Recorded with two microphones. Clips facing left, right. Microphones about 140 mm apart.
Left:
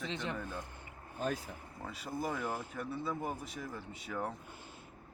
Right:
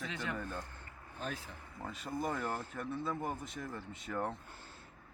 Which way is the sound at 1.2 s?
45° left (ahead or behind).